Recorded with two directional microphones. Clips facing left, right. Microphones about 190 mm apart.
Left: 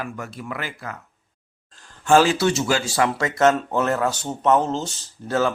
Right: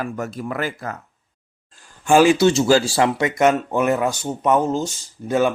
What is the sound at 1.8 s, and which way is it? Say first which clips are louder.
Speech: right 2 dB; 15° right (ahead or behind).